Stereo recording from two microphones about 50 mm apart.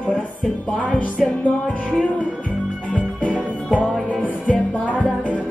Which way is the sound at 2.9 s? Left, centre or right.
Left.